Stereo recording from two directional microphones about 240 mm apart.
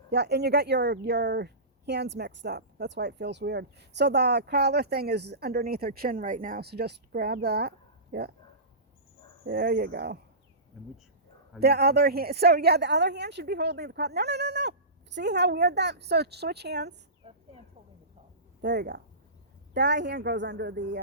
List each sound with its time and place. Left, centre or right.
0.1 s a woman's voice: right
9.4 s speech: right
11.6 s a woman's voice: right
17.2 s a sound: right
18.6 s a woman's voice: right